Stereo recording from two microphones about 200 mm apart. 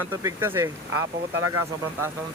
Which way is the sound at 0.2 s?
15° right (ahead or behind).